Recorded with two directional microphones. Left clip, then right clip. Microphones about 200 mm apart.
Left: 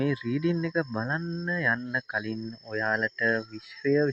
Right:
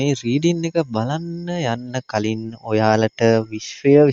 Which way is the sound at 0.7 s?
35° right (ahead or behind).